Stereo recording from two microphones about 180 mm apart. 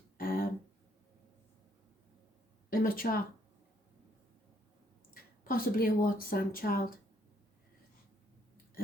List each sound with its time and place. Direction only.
0.2 s a sound: 55° left (ahead or behind)
2.6 s speech: 55° left (ahead or behind)
5.1 s speech: 55° left (ahead or behind)